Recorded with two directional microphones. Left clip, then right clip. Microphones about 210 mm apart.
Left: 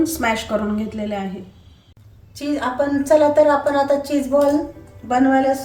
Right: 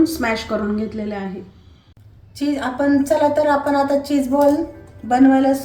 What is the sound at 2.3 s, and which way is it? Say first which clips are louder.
A woman's voice: even; 10° left (ahead or behind).